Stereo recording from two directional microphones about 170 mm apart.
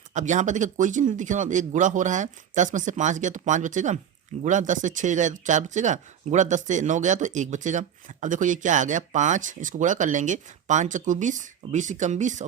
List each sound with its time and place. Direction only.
0.1 s speech: 45° right (ahead or behind)